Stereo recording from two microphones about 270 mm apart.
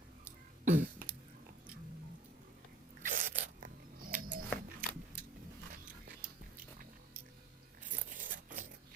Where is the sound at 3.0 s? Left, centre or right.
Right.